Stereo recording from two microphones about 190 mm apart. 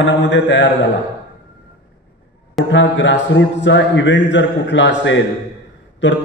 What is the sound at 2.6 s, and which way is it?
A man's voice, 70° left (ahead or behind).